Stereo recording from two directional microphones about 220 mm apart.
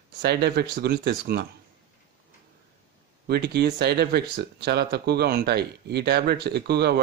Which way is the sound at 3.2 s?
50° right (ahead or behind).